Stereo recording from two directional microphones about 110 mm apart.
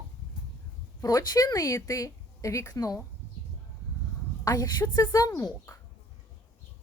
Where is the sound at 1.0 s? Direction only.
30° left (ahead or behind).